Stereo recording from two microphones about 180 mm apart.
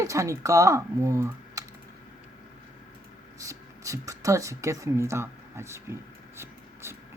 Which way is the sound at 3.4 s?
15° right (ahead or behind).